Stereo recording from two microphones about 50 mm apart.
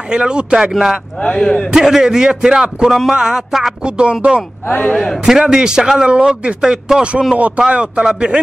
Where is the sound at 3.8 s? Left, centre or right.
Right.